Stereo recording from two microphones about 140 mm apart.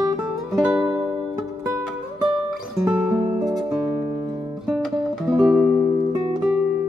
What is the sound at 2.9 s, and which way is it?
Music, 5° right (ahead or behind).